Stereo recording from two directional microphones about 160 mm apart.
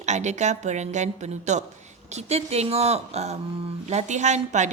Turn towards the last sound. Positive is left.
turn(degrees=-45)  # may be behind; listen again after turning